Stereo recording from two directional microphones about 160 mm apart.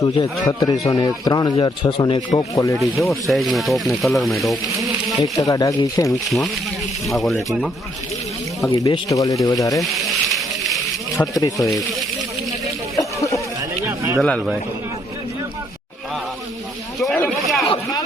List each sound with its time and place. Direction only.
0.0 s speech: 20° left (ahead or behind)
2.7 s speech: centre (ahead or behind)
4.8 s insect: centre (ahead or behind)
5.4 s speech: 20° left (ahead or behind)
6.1 s speech: centre (ahead or behind)
8.6 s speech: 20° left (ahead or behind)
9.8 s a sound: centre (ahead or behind)
11.5 s speech: centre (ahead or behind)
13.0 s a sound: 20° left (ahead or behind)
13.6 s a sound: 15° right (ahead or behind)
14.2 s speech: 5° left (ahead or behind)
17.2 s a sound: 5° left (ahead or behind)